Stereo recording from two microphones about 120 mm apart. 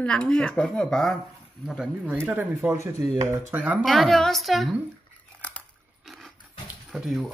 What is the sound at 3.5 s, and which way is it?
Speech, 10° right (ahead or behind).